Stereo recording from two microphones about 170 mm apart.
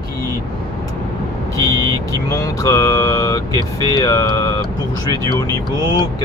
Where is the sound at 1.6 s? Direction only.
20° left (ahead or behind).